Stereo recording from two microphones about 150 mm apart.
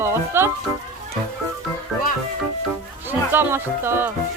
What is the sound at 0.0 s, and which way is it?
Speech, 15° right (ahead or behind).